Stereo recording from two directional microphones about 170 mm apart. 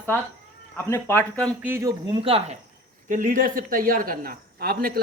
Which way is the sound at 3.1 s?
50° right (ahead or behind).